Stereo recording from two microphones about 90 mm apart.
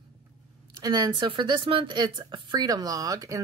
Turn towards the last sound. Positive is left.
turn(degrees=-40)  # may be behind; listen again after turning